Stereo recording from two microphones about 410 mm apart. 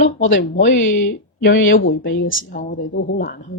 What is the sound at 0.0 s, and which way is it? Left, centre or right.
A woman's voice, left.